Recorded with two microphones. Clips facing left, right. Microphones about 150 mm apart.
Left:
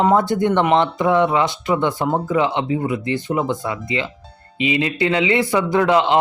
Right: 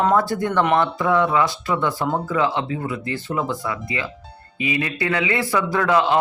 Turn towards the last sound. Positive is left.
turn(degrees=20)  # may be behind; listen again after turning